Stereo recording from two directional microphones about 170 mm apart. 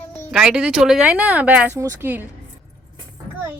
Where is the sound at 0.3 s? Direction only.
5° right (ahead or behind).